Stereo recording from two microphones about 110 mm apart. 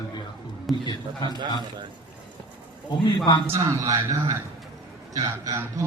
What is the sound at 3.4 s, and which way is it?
A man's voice, 25° right (ahead or behind).